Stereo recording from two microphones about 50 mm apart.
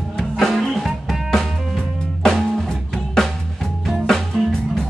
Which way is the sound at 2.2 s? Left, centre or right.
Centre.